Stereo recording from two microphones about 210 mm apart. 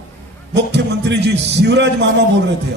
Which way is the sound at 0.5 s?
55° right (ahead or behind).